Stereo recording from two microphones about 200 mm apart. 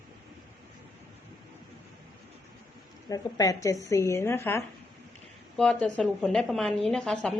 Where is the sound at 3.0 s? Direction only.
15° left (ahead or behind).